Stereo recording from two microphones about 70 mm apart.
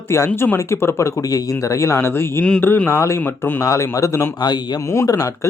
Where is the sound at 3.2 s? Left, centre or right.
Left.